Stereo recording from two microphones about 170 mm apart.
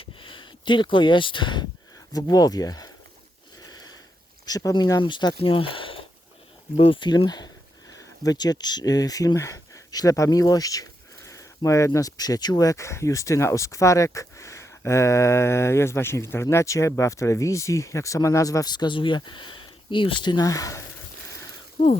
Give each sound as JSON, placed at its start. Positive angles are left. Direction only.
{"t": 0.0, "sound": "a sound", "side_deg": 30}
{"t": 2.1, "sound": "speech", "side_deg": 20}
{"t": 3.7, "sound": "sniff", "side_deg": 25}
{"t": 4.4, "sound": "speech", "side_deg": 20}
{"t": 21.8, "sound": "speech", "side_deg": 30}